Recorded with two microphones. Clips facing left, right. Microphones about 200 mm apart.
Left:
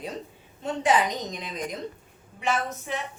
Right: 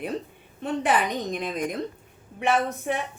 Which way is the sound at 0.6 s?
60° right (ahead or behind).